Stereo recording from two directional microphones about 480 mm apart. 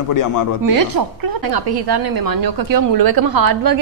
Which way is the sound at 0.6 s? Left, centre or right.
Right.